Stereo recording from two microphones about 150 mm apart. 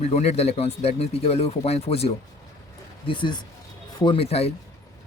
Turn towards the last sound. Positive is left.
turn(degrees=40)  # may be behind; listen again after turning